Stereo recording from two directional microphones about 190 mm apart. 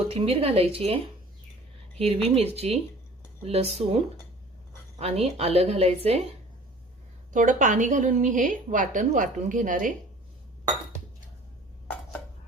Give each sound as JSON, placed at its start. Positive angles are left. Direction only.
{"t": 0.1, "sound": "a woman's voice", "side_deg": -30}
{"t": 2.2, "sound": "a woman's voice", "side_deg": -30}
{"t": 7.3, "sound": "a woman's voice", "side_deg": -45}